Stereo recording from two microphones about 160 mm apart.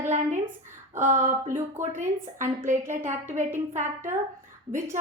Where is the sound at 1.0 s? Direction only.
50° right (ahead or behind).